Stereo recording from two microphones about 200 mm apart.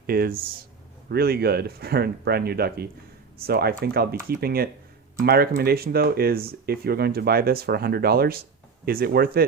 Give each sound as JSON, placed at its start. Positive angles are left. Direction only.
{"t": 0.1, "sound": "speech", "side_deg": -50}